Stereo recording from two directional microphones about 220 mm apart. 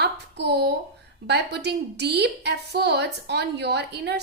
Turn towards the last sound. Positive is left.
turn(degrees=-50)  # may be behind; listen again after turning